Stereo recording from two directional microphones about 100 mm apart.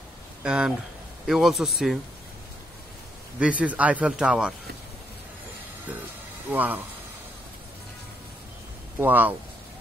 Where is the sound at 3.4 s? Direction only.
15° right (ahead or behind).